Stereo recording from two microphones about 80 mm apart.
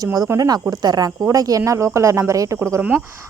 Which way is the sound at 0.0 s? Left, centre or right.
Right.